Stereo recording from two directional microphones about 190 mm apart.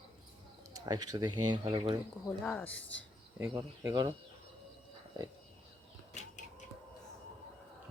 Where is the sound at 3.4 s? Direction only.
15° right (ahead or behind).